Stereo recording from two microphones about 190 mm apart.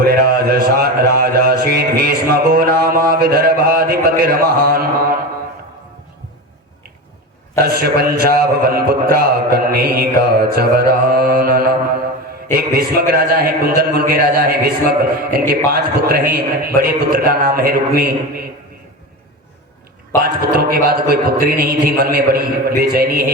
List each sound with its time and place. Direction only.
0.0 s a man's voice: 55° right (ahead or behind)
7.6 s a man's voice: 55° right (ahead or behind)
20.2 s a man's voice: 50° right (ahead or behind)